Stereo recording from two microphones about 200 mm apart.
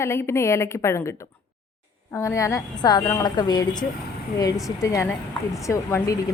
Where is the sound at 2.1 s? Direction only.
15° left (ahead or behind).